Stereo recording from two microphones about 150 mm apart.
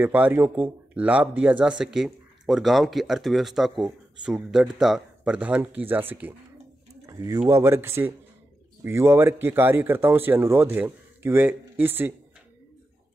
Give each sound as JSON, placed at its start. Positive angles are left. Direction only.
{"t": 0.0, "sound": "speech", "side_deg": -10}
{"t": 7.1, "sound": "speech", "side_deg": -25}